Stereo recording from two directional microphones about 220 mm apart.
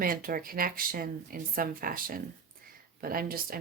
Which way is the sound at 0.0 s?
40° right (ahead or behind).